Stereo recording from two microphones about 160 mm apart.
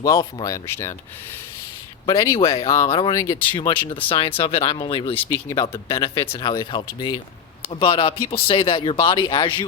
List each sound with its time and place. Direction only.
0.0 s speech: 25° left (ahead or behind)
2.1 s speech: 15° left (ahead or behind)
2.4 s speech: 35° left (ahead or behind)
5.3 s speech: 20° left (ahead or behind)